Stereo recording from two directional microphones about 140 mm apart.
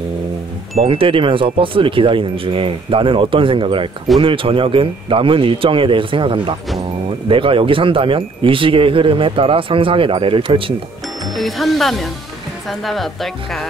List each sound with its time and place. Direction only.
0.7 s speech: 40° right (ahead or behind)
11.3 s speech: centre (ahead or behind)